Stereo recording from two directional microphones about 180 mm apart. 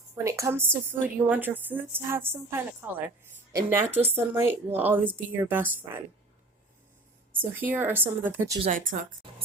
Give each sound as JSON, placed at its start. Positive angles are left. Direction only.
{"t": 0.3, "sound": "a woman's voice", "side_deg": -15}
{"t": 7.3, "sound": "a woman's voice", "side_deg": -10}
{"t": 8.7, "sound": "speech", "side_deg": -50}